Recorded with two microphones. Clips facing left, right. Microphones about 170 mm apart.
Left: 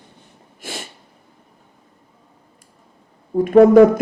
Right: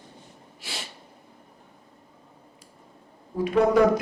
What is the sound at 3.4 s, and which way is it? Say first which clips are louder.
Speech: left 10 dB; 50° left (ahead or behind).